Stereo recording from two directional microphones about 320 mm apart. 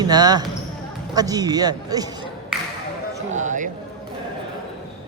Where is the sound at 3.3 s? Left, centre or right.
Right.